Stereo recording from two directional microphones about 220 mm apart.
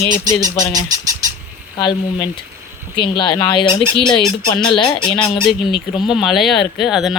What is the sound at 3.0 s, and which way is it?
Speech, 20° left (ahead or behind).